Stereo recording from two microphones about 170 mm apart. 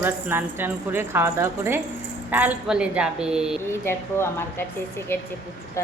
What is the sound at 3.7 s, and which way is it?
Speech, 15° left (ahead or behind).